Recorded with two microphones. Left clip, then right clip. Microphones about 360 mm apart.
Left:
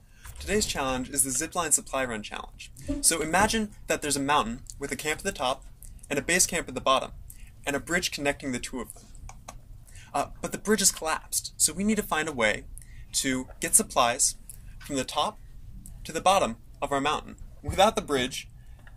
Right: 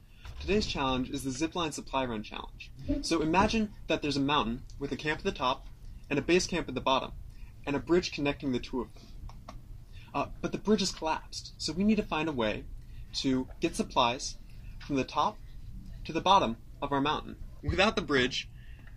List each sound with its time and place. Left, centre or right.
0.5 s speech: left
9.3 s tick-tock: left
11.1 s speech: left